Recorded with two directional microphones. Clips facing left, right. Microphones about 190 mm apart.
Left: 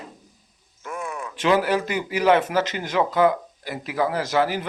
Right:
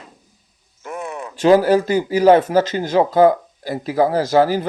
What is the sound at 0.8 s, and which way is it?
A man's voice, 20° right (ahead or behind).